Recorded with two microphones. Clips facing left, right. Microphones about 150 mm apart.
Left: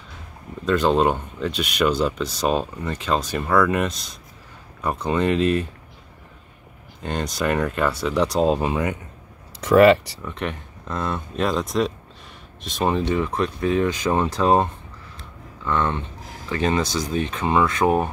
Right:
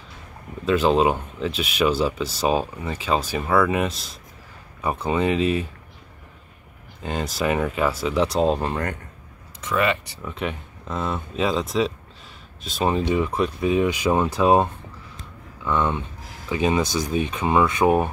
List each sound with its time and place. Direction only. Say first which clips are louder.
0.7 s speech: even; 5° right (ahead or behind)
7.0 s speech: even; 5° right (ahead or behind)
9.6 s speech: left 10 dB; 65° left (ahead or behind)
10.2 s speech: even; 5° right (ahead or behind)